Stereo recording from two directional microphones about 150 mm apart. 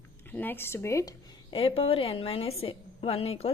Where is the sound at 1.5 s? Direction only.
40° left (ahead or behind).